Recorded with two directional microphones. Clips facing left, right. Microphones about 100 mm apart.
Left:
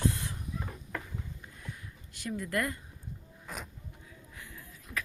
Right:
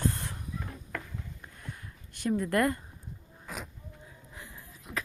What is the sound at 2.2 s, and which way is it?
Speech, 50° right (ahead or behind).